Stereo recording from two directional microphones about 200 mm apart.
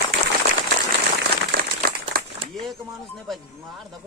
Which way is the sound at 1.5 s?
50° right (ahead or behind).